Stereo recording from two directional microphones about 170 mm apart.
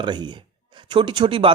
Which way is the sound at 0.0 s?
25° right (ahead or behind).